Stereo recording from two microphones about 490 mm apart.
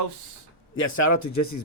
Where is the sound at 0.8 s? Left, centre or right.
Left.